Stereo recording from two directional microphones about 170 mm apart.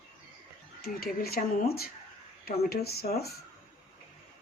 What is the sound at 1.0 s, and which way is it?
Speech, 60° left (ahead or behind).